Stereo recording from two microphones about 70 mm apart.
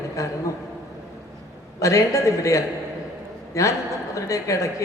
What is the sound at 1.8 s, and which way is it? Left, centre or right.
A woman's voice, left.